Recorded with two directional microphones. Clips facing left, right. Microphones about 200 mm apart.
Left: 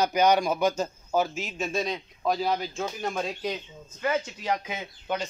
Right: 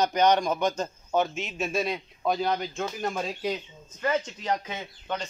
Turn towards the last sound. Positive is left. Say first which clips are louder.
# left 2 dB
turn(degrees=5)  # may be behind; listen again after turning